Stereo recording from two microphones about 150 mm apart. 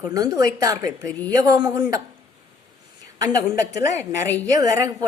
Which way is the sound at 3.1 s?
25° right (ahead or behind).